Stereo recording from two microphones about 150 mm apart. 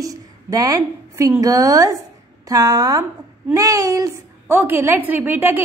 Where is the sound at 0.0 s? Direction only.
25° right (ahead or behind).